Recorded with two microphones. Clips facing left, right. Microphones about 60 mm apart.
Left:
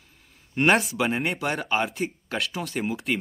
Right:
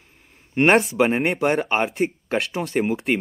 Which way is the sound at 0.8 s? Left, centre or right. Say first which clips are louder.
Right 7 dB; right.